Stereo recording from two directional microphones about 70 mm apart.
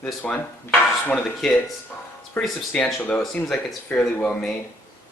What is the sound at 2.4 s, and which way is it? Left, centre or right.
Speech, centre.